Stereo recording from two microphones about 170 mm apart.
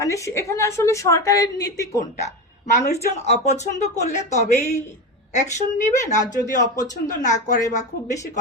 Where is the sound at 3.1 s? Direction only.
45° left (ahead or behind).